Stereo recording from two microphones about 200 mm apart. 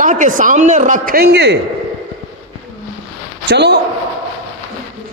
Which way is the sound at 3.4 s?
55° right (ahead or behind).